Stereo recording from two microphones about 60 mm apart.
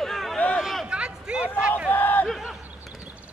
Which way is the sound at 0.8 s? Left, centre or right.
Centre.